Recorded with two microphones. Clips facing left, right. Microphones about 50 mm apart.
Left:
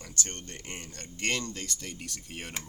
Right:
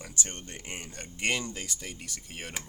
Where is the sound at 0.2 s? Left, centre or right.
Centre.